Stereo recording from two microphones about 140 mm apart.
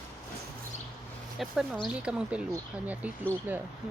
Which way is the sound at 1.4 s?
Centre (ahead or behind).